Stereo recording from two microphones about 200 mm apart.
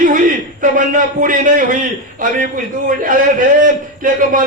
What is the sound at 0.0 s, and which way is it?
A man's voice, 40° right (ahead or behind).